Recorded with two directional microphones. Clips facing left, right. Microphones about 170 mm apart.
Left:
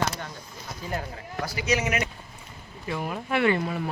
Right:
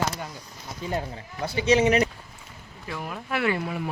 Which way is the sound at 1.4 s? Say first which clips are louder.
Right 6 dB; 25° right (ahead or behind).